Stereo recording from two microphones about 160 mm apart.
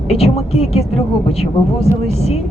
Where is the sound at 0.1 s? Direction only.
40° left (ahead or behind).